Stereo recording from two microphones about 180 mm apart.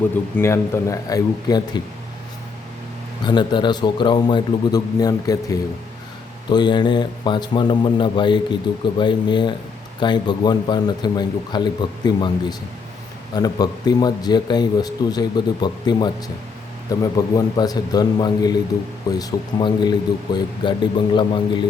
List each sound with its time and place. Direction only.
0.3 s speech: 15° left (ahead or behind)
3.2 s speech: 25° left (ahead or behind)